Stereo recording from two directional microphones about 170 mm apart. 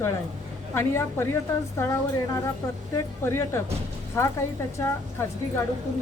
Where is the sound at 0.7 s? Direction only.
15° left (ahead or behind).